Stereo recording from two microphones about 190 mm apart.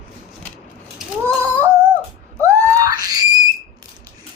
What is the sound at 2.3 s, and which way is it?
Screaming, 15° right (ahead or behind).